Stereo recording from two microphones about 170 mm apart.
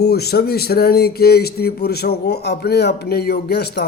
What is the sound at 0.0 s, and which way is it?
Speech, 70° left (ahead or behind).